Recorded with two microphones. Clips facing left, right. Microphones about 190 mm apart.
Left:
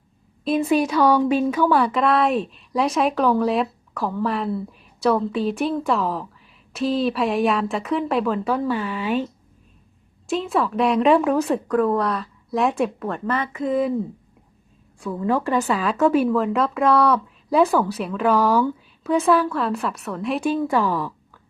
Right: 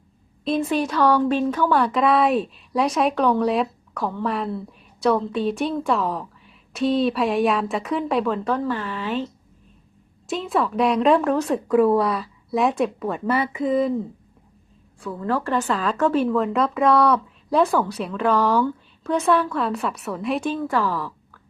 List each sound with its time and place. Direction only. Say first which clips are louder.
0.4 s speech: left 3 dB; 5° left (ahead or behind)
10.2 s speech: left 1 dB; centre (ahead or behind)
15.0 s speech: left 3 dB; 15° left (ahead or behind)
20.4 s a woman's voice: left 3 dB; 10° left (ahead or behind)